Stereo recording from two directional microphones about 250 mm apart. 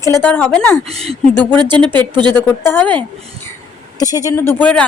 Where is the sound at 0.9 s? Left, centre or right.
Right.